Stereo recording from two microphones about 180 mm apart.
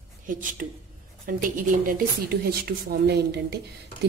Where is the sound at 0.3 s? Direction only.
50° right (ahead or behind).